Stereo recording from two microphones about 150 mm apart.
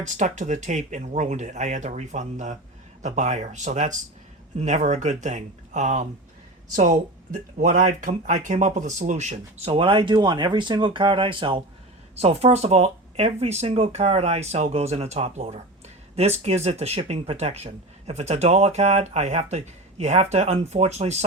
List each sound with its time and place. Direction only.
0.0 s a woman's voice: 55° right (ahead or behind)